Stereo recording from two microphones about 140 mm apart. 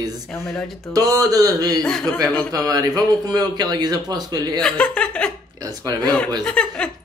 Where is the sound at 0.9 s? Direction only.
25° right (ahead or behind).